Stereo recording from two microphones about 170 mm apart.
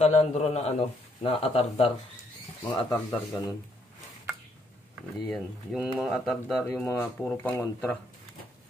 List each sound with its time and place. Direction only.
0.0 s speech: 40° left (ahead or behind)
2.7 s speech: 20° left (ahead or behind)
5.3 s speech: 5° right (ahead or behind)
6.6 s speech: 10° left (ahead or behind)